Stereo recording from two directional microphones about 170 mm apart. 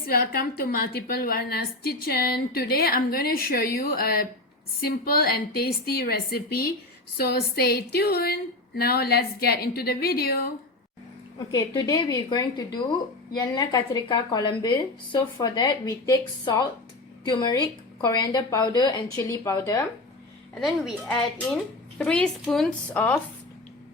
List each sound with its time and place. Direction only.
0.1 s a woman's voice: 60° left (ahead or behind)
11.5 s a woman's voice: 25° left (ahead or behind)
20.6 s speech: centre (ahead or behind)